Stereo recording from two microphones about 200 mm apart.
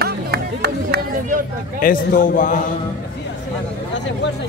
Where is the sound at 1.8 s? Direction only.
40° left (ahead or behind).